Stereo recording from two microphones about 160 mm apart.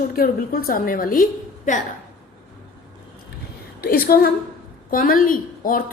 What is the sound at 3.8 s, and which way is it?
Speech, 70° left (ahead or behind).